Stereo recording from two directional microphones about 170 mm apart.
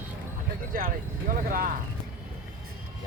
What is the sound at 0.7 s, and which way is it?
Speech, 55° right (ahead or behind).